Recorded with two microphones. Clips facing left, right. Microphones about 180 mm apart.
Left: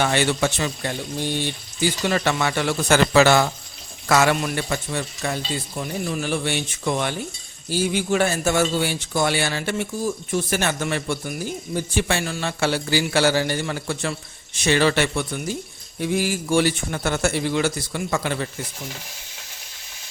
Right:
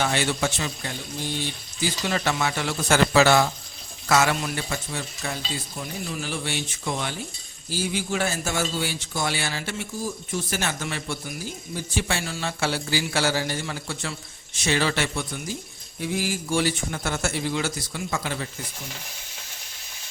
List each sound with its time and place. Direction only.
0.0 s a man's voice: 65° left (ahead or behind)